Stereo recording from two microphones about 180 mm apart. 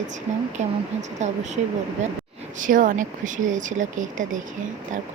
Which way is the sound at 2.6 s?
50° right (ahead or behind).